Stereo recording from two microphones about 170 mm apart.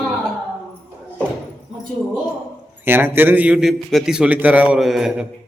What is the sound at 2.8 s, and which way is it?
A man's voice, 10° right (ahead or behind).